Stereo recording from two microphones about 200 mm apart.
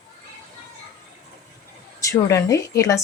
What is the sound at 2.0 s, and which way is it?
Speech, 15° left (ahead or behind).